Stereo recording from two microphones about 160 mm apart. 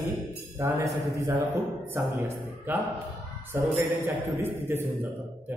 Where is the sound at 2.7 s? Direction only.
10° right (ahead or behind).